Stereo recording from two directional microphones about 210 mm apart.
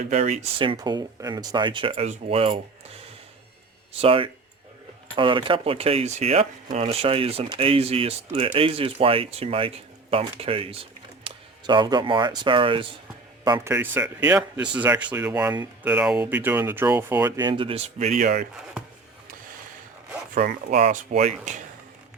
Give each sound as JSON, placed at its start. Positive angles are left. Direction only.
{"t": 0.1, "sound": "speech", "side_deg": -35}
{"t": 0.6, "sound": "speech", "side_deg": -20}
{"t": 4.0, "sound": "speech", "side_deg": -25}
{"t": 13.7, "sound": "speech", "side_deg": -10}
{"t": 20.3, "sound": "speech", "side_deg": -40}